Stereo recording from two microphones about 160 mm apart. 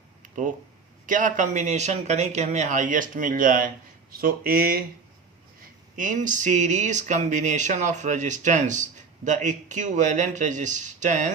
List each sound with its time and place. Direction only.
1.0 s speech: 55° right (ahead or behind)
6.0 s speech: 55° right (ahead or behind)